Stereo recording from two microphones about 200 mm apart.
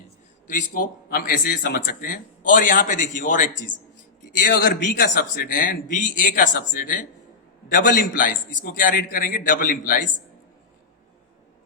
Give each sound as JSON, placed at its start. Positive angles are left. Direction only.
{"t": 0.4, "sound": "speech", "side_deg": 40}
{"t": 4.5, "sound": "a man's voice", "side_deg": 55}
{"t": 5.3, "sound": "a man's voice", "side_deg": 45}